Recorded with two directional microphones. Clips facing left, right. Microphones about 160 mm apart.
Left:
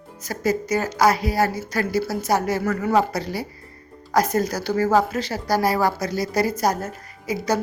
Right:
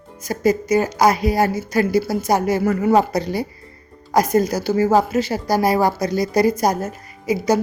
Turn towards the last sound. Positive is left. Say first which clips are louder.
# right 6 dB
turn(degrees=-15)  # may be behind; listen again after turning